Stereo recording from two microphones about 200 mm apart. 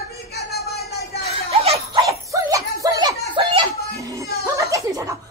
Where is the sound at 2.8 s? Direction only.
20° right (ahead or behind).